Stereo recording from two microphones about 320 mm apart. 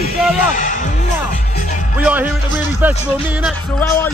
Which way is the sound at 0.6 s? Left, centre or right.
Left.